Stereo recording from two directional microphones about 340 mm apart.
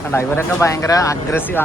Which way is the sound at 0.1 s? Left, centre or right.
Centre.